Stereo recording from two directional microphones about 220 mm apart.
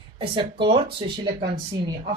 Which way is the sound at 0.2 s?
25° right (ahead or behind).